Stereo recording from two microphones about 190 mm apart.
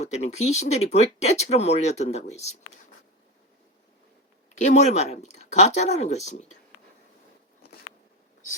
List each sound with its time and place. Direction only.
0.0 s speech: 35° left (ahead or behind)
4.6 s speech: 40° left (ahead or behind)